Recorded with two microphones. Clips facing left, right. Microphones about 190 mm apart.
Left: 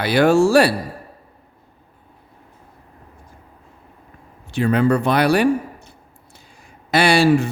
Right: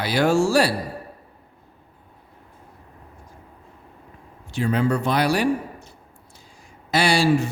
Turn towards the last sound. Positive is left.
turn(degrees=60)  # may be behind; listen again after turning